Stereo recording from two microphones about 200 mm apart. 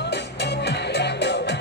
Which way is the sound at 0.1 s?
55° left (ahead or behind).